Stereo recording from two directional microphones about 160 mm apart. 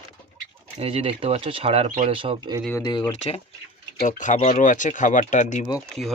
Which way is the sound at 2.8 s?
25° left (ahead or behind).